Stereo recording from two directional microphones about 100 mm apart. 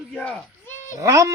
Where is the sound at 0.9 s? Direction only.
35° right (ahead or behind).